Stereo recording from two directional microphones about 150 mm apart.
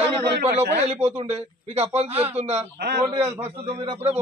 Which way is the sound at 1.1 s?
45° right (ahead or behind).